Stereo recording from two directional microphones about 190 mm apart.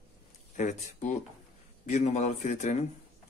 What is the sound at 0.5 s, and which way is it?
Speech, 40° left (ahead or behind).